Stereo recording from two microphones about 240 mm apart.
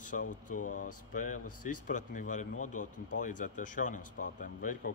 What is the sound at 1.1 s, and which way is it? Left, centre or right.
A man's voice, left.